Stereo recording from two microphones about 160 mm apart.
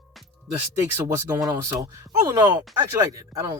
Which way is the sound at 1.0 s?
15° right (ahead or behind).